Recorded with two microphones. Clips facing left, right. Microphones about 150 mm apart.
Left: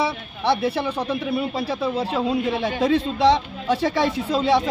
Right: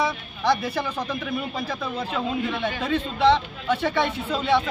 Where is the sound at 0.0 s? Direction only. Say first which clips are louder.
Left 1 dB; 30° left (ahead or behind).